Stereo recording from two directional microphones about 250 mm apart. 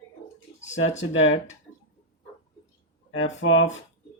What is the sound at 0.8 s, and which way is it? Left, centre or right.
Speech, left.